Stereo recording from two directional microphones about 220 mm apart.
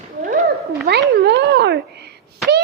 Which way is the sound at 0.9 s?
50° right (ahead or behind).